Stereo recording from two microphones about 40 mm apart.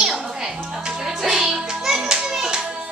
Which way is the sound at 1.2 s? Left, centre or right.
Centre.